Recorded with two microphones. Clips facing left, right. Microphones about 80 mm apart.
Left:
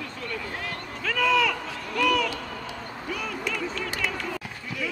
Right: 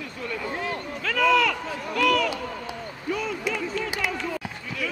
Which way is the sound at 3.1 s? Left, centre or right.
Right.